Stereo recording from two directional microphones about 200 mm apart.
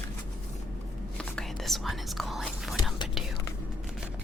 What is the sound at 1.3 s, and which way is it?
Whispering, centre (ahead or behind).